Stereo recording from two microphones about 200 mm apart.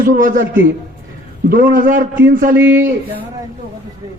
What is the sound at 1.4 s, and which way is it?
A man's voice, 45° right (ahead or behind).